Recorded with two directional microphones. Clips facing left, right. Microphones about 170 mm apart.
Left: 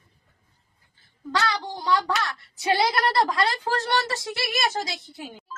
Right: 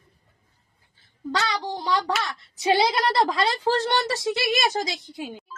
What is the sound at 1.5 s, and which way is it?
A woman's voice, 20° right (ahead or behind).